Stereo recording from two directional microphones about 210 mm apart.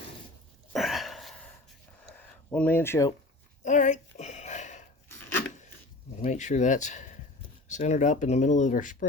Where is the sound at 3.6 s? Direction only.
35° left (ahead or behind).